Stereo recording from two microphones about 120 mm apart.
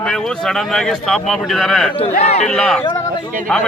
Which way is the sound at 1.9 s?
60° left (ahead or behind).